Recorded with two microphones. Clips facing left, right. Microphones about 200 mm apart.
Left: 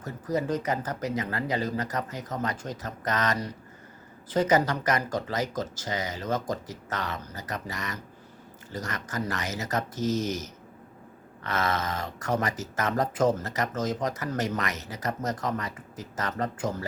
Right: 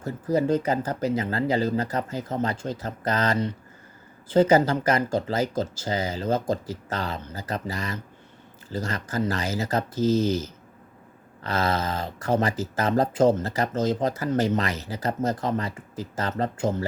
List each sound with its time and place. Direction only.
0.0 s speech: 30° right (ahead or behind)